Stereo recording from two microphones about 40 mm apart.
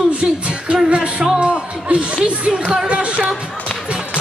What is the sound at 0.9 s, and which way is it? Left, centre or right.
Music, right.